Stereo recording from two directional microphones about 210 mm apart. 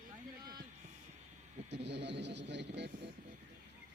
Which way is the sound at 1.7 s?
55° right (ahead or behind).